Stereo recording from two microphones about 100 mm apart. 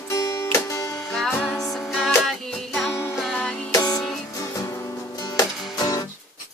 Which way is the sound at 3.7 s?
40° left (ahead or behind).